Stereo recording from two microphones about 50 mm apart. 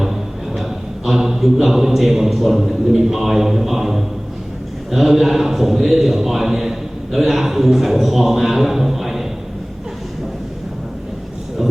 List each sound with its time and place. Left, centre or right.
0.0 s a man's voice: centre